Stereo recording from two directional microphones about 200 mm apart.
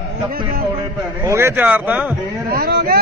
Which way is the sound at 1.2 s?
15° right (ahead or behind).